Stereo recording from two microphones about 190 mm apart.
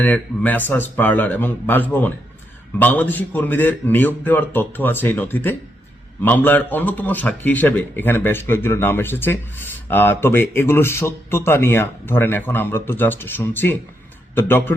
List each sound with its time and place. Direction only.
0.0 s a man's voice: 10° left (ahead or behind)